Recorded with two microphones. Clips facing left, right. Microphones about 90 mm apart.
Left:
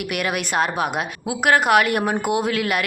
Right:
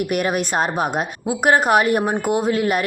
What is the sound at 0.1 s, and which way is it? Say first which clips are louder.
Speech: right 3 dB; 35° right (ahead or behind).